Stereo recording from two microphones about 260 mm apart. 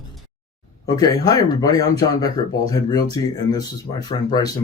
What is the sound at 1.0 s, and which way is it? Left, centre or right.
Speech, centre.